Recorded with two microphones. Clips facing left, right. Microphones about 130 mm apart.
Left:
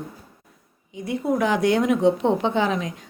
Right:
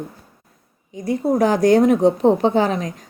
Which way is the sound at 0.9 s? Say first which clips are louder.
Right 5 dB; 40° right (ahead or behind).